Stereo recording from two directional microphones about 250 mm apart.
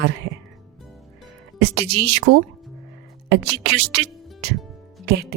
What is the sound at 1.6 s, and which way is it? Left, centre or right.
A woman's voice, right.